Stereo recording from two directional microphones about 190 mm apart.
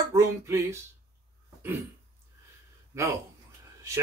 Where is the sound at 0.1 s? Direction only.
15° right (ahead or behind).